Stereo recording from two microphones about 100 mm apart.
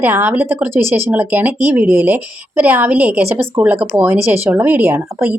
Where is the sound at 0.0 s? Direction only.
20° right (ahead or behind).